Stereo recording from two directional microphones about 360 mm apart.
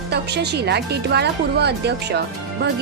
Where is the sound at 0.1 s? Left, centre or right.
Right.